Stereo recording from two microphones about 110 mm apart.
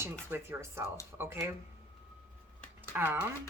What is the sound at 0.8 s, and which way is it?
Speech, 30° left (ahead or behind).